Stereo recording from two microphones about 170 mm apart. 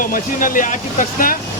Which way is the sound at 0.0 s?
55° left (ahead or behind).